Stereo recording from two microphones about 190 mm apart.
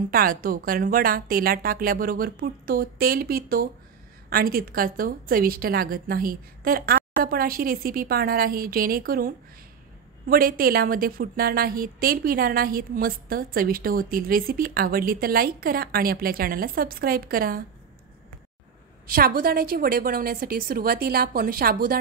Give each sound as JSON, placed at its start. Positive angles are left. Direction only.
{"t": 0.1, "sound": "a woman's voice", "side_deg": -50}
{"t": 19.1, "sound": "a woman's voice", "side_deg": -50}